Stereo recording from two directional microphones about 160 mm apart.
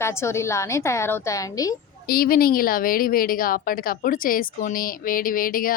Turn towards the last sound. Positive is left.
turn(degrees=60)  # may be behind; listen again after turning